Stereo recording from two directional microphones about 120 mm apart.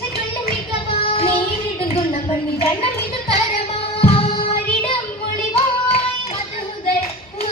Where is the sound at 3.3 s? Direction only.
55° left (ahead or behind).